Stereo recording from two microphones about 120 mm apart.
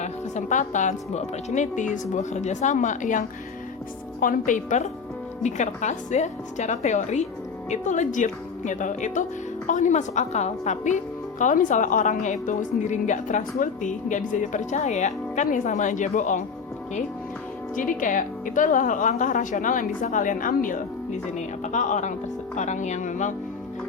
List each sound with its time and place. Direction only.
0.0 s speech: 85° left
4.4 s speech: 90° left
5.4 s speech: 80° left
7.7 s speech: 85° left
17.7 s speech: 90° left